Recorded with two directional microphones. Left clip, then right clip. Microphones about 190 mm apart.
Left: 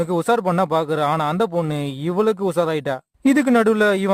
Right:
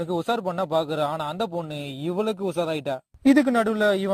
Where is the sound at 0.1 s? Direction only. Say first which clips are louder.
Left 5 dB; 25° left (ahead or behind).